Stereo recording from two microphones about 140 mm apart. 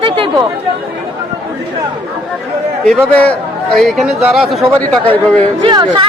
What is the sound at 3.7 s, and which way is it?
Speech, centre (ahead or behind).